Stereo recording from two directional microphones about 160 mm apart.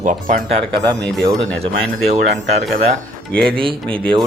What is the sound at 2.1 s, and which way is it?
Speech, 45° right (ahead or behind).